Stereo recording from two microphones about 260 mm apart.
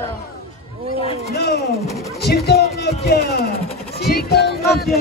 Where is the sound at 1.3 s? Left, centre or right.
Left.